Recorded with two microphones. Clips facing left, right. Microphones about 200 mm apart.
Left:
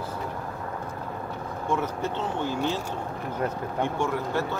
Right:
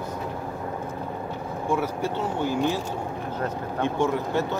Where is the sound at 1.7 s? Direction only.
10° right (ahead or behind).